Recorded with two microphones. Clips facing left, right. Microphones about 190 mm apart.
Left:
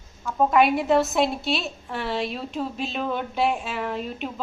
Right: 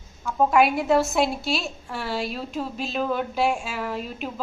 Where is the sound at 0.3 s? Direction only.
Centre (ahead or behind).